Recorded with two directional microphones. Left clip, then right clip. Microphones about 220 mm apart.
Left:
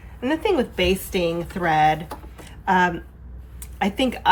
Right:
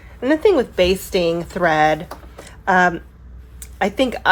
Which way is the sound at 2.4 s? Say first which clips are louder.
Right 4 dB; 40° right (ahead or behind).